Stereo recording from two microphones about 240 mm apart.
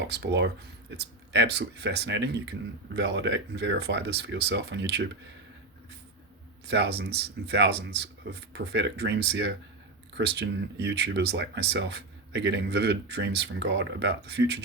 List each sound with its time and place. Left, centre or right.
0.0 s speech: right
6.7 s speech: right